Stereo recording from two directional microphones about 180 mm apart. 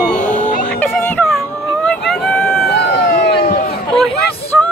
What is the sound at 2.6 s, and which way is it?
Vehicle, 70° left (ahead or behind).